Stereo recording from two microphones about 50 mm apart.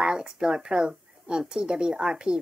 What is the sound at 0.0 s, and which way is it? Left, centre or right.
Speech, centre.